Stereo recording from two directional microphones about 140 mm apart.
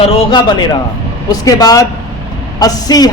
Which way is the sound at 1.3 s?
25° left (ahead or behind).